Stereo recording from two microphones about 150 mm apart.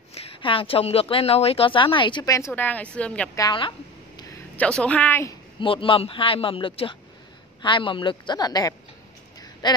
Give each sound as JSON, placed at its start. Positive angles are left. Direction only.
{"t": 0.1, "sound": "speech", "side_deg": 40}
{"t": 2.5, "sound": "a woman's voice", "side_deg": 10}
{"t": 3.3, "sound": "speech", "side_deg": 30}
{"t": 4.6, "sound": "a woman's voice", "side_deg": 5}
{"t": 5.6, "sound": "speech", "side_deg": 35}
{"t": 9.4, "sound": "a sound", "side_deg": 30}